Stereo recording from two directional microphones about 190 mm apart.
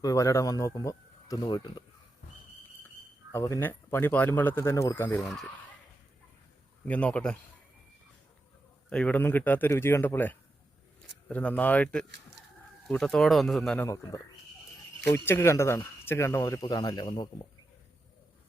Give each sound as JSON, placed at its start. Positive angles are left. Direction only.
{"t": 0.0, "sound": "speech", "side_deg": 20}
{"t": 3.3, "sound": "speech", "side_deg": 15}
{"t": 6.8, "sound": "speech", "side_deg": 10}
{"t": 8.9, "sound": "speech", "side_deg": 5}
{"t": 13.8, "sound": "speech", "side_deg": 15}